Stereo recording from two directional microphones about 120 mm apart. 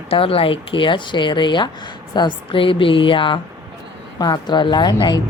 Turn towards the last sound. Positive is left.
turn(degrees=40)  # may be behind; listen again after turning